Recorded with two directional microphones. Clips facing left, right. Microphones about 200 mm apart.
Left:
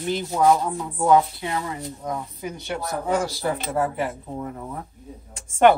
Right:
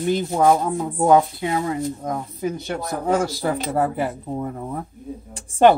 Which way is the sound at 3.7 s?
35° right (ahead or behind).